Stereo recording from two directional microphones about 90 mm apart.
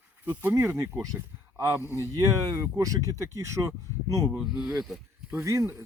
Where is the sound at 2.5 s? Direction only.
40° right (ahead or behind).